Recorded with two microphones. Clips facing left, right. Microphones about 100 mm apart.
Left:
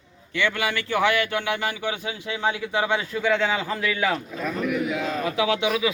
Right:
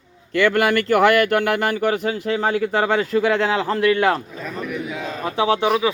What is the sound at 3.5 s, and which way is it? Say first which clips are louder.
Speech: right 8 dB; 80° right.